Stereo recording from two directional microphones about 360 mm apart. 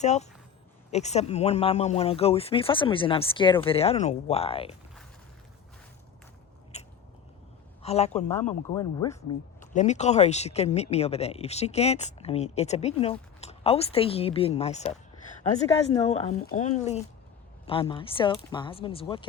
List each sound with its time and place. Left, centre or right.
0.0 s speech: centre
6.7 s biting: centre
7.8 s speech: centre